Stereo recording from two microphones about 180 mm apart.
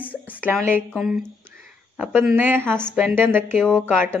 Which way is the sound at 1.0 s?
Centre (ahead or behind).